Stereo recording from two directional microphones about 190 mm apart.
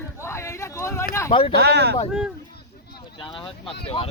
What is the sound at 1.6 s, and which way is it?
Speech, 60° right (ahead or behind).